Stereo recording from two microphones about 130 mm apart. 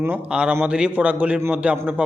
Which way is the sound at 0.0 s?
10° right (ahead or behind).